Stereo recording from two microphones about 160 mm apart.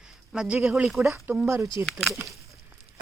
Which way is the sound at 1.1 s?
15° right (ahead or behind).